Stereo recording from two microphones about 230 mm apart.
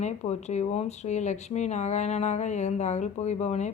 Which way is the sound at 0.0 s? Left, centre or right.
Left.